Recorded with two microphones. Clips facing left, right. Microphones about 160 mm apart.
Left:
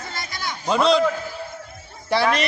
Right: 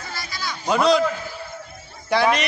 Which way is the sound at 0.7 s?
Centre (ahead or behind).